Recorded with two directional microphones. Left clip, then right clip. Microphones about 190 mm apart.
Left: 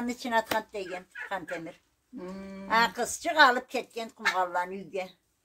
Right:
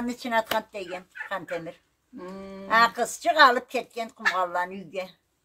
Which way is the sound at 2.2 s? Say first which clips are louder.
Right 3 dB; 5° left (ahead or behind).